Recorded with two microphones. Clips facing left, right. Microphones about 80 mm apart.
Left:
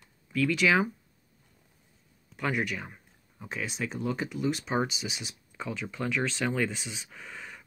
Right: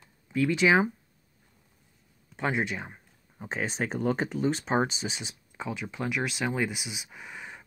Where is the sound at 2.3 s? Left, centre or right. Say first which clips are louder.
Right 1 dB; right.